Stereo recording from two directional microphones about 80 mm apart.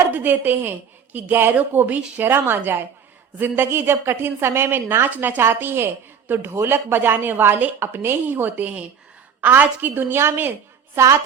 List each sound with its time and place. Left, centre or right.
0.1 s a woman's voice: right